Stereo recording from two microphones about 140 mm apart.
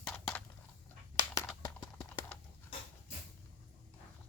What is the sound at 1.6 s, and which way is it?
Clip-clop, 25° left (ahead or behind).